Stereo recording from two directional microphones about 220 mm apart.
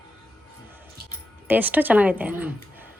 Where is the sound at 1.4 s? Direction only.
10° right (ahead or behind).